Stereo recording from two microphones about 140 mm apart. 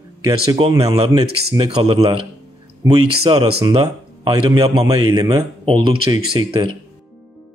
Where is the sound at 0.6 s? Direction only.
40° right (ahead or behind).